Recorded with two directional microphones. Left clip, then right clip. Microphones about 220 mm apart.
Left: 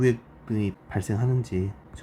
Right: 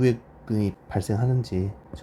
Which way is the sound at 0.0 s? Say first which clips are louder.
Even; 10° right (ahead or behind).